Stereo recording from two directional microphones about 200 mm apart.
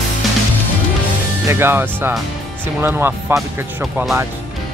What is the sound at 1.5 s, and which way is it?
Speech, 10° right (ahead or behind).